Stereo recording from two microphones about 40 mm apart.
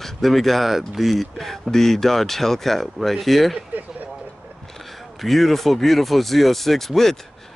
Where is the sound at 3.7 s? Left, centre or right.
Right.